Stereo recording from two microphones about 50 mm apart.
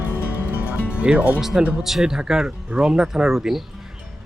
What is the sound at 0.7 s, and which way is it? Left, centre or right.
Music, right.